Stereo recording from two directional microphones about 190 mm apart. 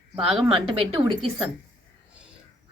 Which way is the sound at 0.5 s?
25° right (ahead or behind).